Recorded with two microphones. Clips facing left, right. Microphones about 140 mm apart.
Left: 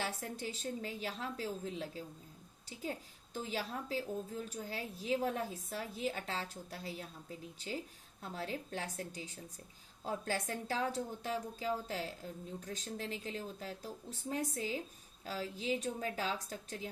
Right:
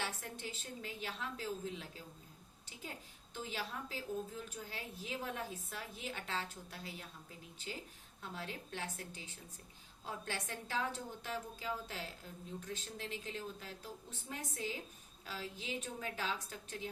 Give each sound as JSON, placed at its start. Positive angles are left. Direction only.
{"t": 0.0, "sound": "a woman's voice", "side_deg": 35}
{"t": 3.3, "sound": "a woman's voice", "side_deg": 40}
{"t": 8.2, "sound": "a woman's voice", "side_deg": 35}